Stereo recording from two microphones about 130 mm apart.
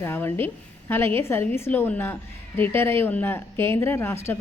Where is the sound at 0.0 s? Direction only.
20° left (ahead or behind).